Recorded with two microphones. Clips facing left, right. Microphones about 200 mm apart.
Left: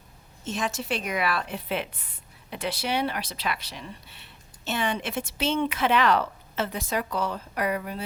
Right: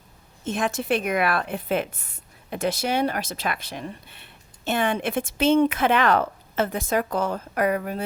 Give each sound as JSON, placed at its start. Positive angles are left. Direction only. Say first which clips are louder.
{"t": 0.4, "sound": "a woman's voice", "louder": "right 5 dB", "side_deg": -55}